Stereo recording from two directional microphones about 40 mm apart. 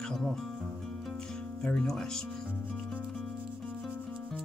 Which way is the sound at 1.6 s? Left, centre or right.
Centre.